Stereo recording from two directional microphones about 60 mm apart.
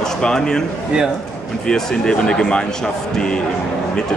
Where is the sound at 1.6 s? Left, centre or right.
Centre.